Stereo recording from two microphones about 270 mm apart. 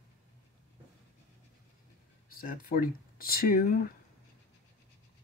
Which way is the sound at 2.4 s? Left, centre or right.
Left.